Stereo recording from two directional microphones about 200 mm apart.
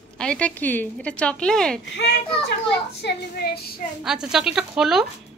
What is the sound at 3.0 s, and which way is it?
Speech, 50° left (ahead or behind).